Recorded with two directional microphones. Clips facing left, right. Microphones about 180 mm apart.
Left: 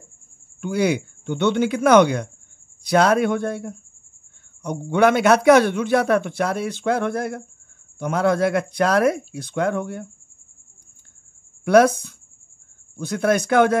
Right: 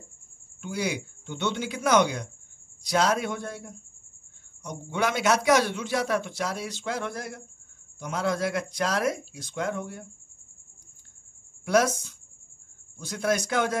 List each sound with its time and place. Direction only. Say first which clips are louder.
0.6 s a man's voice: left 9 dB; 60° left (ahead or behind)
11.6 s a man's voice: left 9 dB; 60° left (ahead or behind)